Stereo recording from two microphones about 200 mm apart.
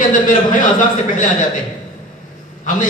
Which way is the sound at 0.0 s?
40° left (ahead or behind).